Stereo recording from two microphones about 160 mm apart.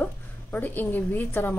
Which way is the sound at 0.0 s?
10° left (ahead or behind).